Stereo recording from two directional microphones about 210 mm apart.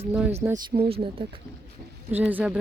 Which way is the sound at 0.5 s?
45° right (ahead or behind).